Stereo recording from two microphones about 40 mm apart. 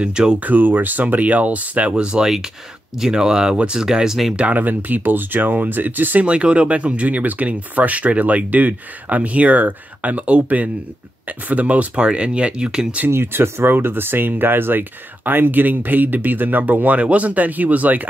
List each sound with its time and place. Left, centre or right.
0.0 s speech: centre
0.4 s speech: right
1.0 s speech: right
2.0 s speech: right
3.8 s speech: centre
4.4 s speech: right
6.2 s speech: right
13.1 s speech: right